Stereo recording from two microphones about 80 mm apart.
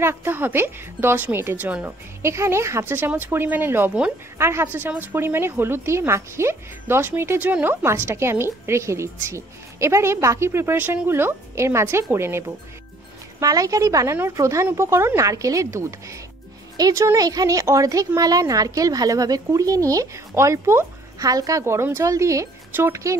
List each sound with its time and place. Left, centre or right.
0.0 s a woman's voice: right
1.6 s speech: centre
2.2 s a woman's voice: right
13.4 s a woman's voice: right
15.2 s a woman's voice: right
21.2 s a woman's voice: right
22.7 s speech: right